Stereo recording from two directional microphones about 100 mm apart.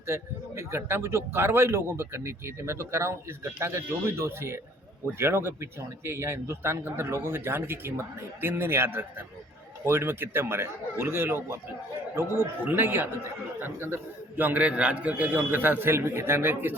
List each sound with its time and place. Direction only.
0.1 s a man's voice: 25° right (ahead or behind)